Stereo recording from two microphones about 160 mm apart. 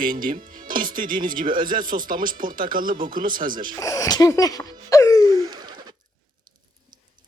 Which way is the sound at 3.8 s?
20° left (ahead or behind).